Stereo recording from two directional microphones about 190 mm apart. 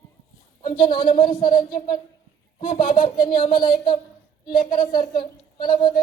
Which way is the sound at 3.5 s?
25° left (ahead or behind).